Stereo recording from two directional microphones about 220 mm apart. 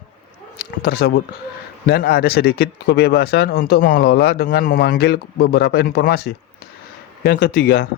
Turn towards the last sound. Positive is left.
turn(degrees=45)  # may be behind; listen again after turning